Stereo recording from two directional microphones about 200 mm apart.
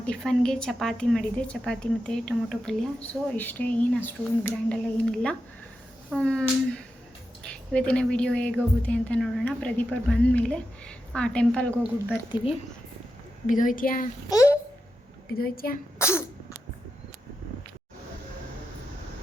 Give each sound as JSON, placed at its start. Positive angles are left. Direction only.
{"t": 0.0, "sound": "a woman's voice", "side_deg": 5}
{"t": 7.4, "sound": "a woman's voice", "side_deg": 5}
{"t": 13.5, "sound": "speech", "side_deg": 40}
{"t": 14.3, "sound": "a child's voice", "side_deg": 15}
{"t": 15.4, "sound": "speech", "side_deg": 50}
{"t": 16.0, "sound": "speech", "side_deg": 15}